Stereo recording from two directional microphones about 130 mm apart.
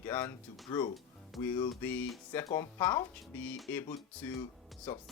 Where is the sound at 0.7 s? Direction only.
35° left (ahead or behind).